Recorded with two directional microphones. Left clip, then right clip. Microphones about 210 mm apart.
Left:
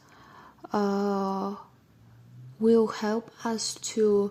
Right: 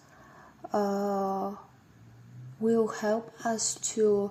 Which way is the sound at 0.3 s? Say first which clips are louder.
Even; 65° left (ahead or behind).